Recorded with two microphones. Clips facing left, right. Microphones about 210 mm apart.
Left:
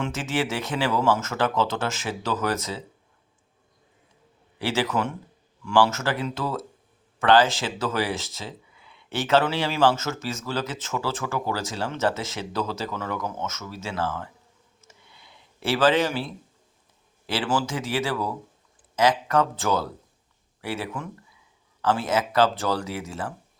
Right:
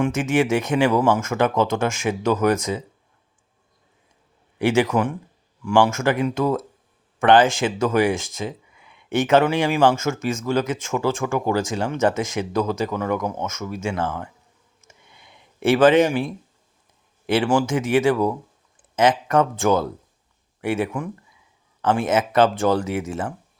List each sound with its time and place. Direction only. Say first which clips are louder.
0.0 s speech: right 7 dB; 15° right (ahead or behind)
4.5 s speech: right 7 dB; 15° right (ahead or behind)
14.8 s a sound: right 2 dB; 20° right (ahead or behind)
17.2 s speech: right 7 dB; 15° right (ahead or behind)